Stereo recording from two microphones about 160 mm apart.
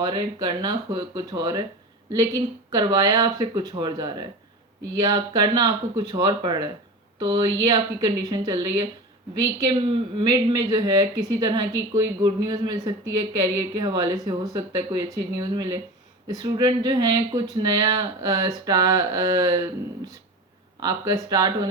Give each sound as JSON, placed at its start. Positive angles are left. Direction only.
{"t": 0.0, "sound": "a woman's voice", "side_deg": -25}
{"t": 10.2, "sound": "speech", "side_deg": -25}
{"t": 20.8, "sound": "speech", "side_deg": -25}